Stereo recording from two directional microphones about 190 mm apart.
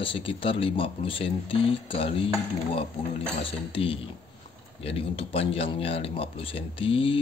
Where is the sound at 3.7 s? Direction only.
30° left (ahead or behind).